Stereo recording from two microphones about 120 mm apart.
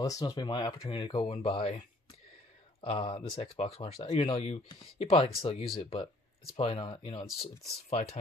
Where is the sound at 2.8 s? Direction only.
50° left (ahead or behind).